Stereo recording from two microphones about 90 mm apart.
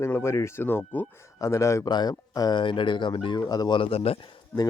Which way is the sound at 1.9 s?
50° left (ahead or behind).